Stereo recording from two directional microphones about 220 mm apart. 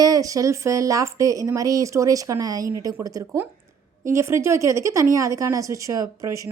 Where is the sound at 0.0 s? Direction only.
15° right (ahead or behind).